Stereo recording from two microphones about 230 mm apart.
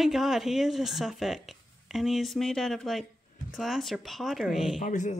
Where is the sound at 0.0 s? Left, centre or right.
Centre.